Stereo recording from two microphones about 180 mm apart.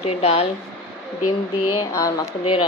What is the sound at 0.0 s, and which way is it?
Speech, 35° left (ahead or behind).